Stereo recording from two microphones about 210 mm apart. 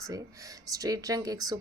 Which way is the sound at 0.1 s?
15° right (ahead or behind).